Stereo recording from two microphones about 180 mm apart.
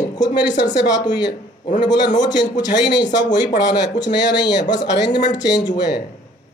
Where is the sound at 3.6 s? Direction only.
75° left (ahead or behind).